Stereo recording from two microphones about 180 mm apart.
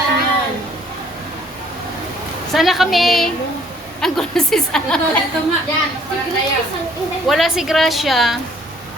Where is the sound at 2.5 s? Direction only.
Centre (ahead or behind).